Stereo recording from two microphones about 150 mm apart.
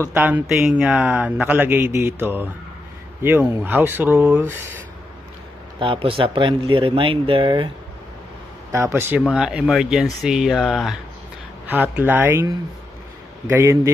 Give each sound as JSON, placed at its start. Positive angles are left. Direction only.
{"t": 0.1, "sound": "speech", "side_deg": -10}
{"t": 5.8, "sound": "speech", "side_deg": -35}
{"t": 8.7, "sound": "speech", "side_deg": -15}
{"t": 9.3, "sound": "speech", "side_deg": -5}
{"t": 13.5, "sound": "a man's voice", "side_deg": -20}